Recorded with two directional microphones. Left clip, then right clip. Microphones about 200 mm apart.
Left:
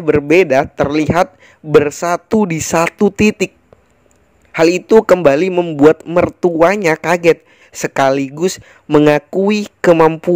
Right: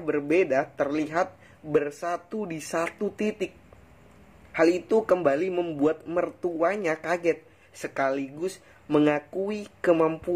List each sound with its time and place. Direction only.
0.0 s a man's voice: 45° left (ahead or behind)